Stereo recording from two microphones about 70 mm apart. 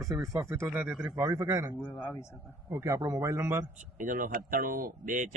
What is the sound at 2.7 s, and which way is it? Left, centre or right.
Speech, right.